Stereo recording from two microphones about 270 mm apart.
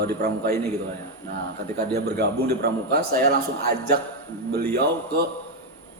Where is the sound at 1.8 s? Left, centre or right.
Right.